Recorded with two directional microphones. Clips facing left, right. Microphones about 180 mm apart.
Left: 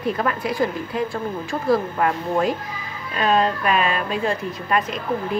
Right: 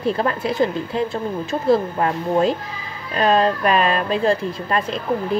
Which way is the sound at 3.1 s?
35° right (ahead or behind).